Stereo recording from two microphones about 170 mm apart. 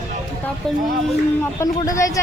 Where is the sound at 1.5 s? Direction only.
20° left (ahead or behind).